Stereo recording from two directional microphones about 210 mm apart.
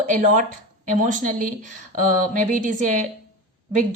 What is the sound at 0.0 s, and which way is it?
A woman's voice, 40° right (ahead or behind).